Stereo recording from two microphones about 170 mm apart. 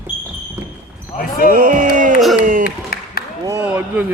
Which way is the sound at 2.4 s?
50° right (ahead or behind).